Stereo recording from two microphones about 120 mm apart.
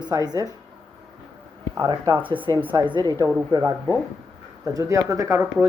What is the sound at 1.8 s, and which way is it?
A man's voice, 40° right (ahead or behind).